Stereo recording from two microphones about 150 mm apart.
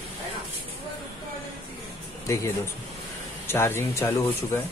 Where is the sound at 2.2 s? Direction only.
20° left (ahead or behind).